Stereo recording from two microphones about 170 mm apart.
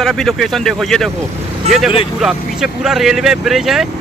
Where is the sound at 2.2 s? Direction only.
5° right (ahead or behind).